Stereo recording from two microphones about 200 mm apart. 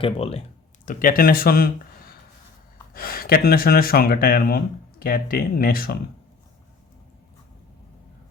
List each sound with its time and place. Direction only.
0.0 s speech: 30° left (ahead or behind)
0.9 s speech: 45° left (ahead or behind)
2.9 s speech: 45° left (ahead or behind)